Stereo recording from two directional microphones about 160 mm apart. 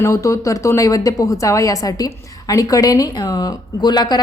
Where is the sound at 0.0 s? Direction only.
20° left (ahead or behind).